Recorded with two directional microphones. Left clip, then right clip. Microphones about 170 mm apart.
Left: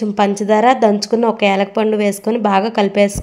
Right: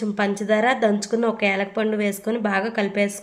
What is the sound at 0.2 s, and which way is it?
A woman's voice, 35° left (ahead or behind).